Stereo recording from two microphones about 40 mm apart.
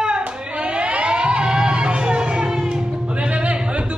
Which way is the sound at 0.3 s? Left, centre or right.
Right.